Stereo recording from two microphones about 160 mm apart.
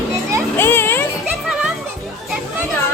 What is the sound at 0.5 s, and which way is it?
Children playing, 15° left (ahead or behind).